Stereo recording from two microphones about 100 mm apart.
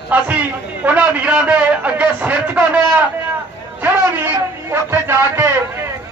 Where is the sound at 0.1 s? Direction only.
15° right (ahead or behind).